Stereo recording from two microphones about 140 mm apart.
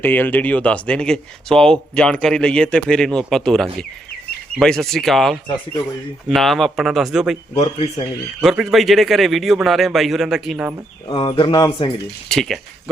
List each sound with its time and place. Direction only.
0.0 s a man's voice: 15° left (ahead or behind); by 7.3 s 5° right (ahead or behind)
7.5 s speech: 45° left (ahead or behind)
8.4 s a man's voice: 5° right (ahead or behind)
11.1 s speech: 35° left (ahead or behind)
12.3 s a man's voice: centre (ahead or behind)